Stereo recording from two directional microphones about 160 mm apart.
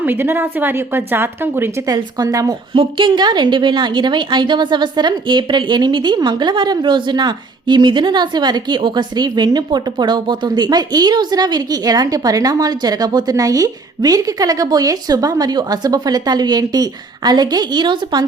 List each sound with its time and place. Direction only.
0.0 s a woman's voice: 15° right (ahead or behind)